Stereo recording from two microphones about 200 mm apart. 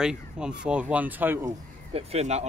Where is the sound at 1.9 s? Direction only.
30° right (ahead or behind).